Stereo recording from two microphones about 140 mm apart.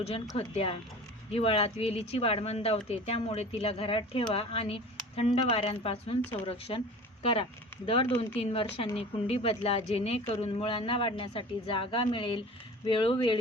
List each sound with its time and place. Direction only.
0.3 s speech: 40° left (ahead or behind)